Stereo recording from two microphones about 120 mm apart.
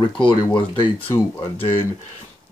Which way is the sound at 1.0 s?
20° left (ahead or behind).